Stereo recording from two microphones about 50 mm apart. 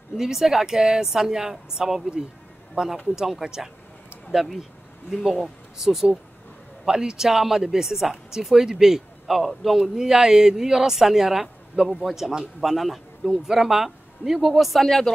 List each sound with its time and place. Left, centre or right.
0.2 s speech: centre